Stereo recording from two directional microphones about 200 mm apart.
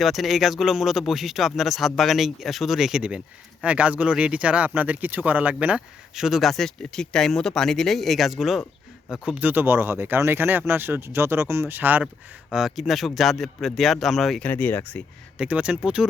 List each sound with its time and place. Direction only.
0.0 s speech: centre (ahead or behind)
15.4 s speech: 5° right (ahead or behind)